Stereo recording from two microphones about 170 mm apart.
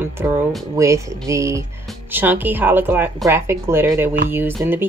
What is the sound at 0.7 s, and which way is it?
Speech, 15° right (ahead or behind).